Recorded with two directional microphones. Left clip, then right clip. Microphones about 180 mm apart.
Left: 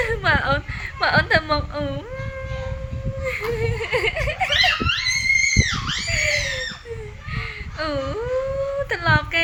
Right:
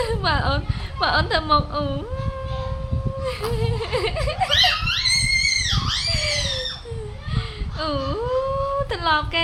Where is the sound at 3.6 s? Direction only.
10° left (ahead or behind).